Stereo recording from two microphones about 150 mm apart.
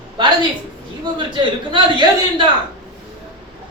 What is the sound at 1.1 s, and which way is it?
Speech, 35° right (ahead or behind).